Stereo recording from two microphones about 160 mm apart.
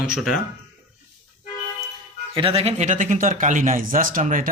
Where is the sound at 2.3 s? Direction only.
35° right (ahead or behind).